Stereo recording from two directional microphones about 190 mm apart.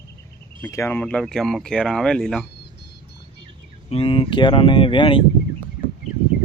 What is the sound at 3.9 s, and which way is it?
Speech, 30° left (ahead or behind).